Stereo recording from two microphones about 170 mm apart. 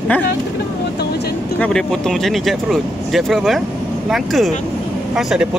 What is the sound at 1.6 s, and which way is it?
Speech, 5° left (ahead or behind).